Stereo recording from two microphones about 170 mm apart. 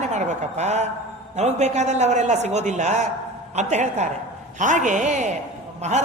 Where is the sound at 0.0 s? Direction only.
45° right (ahead or behind).